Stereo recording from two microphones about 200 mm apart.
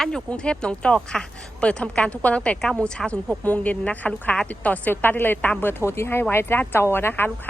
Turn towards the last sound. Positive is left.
turn(degrees=10)  # may be behind; listen again after turning